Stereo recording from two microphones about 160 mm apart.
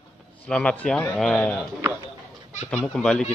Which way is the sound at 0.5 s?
5° left (ahead or behind).